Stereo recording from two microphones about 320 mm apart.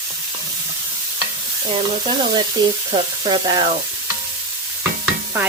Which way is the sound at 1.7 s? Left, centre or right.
Centre.